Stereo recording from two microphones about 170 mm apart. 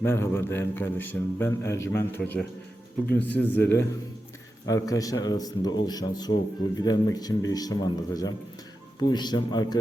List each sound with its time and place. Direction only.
0.0 s a man's voice: 15° left (ahead or behind)